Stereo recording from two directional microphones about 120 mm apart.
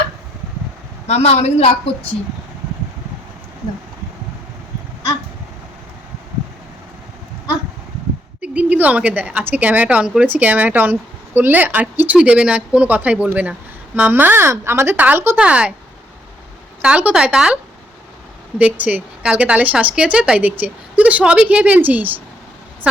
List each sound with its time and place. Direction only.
1.0 s a woman's voice: 65° left (ahead or behind)
8.4 s speech: 10° right (ahead or behind)
16.8 s speech: 10° right (ahead or behind)
18.6 s speech: 10° right (ahead or behind)